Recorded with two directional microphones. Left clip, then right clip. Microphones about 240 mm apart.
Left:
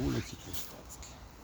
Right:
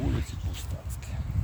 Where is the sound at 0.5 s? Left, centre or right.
Right.